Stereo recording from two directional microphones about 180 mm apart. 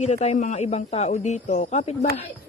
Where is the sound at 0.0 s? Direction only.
40° left (ahead or behind).